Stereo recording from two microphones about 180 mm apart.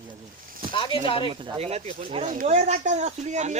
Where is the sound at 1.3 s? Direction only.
25° right (ahead or behind).